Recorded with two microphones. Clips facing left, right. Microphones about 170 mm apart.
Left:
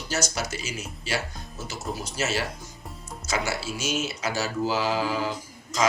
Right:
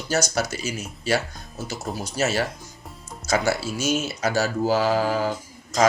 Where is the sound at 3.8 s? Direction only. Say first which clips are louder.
Right 5 dB; 45° right (ahead or behind).